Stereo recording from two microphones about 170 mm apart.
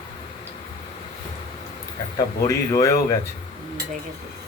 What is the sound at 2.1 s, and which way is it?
A man's voice, 20° left (ahead or behind).